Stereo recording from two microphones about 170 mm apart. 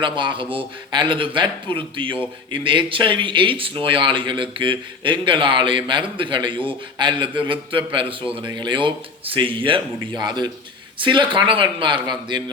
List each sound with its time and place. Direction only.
0.0 s speech: 30° right (ahead or behind)